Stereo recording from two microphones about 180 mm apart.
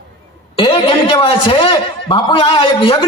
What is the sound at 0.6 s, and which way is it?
A man's voice, 30° left (ahead or behind).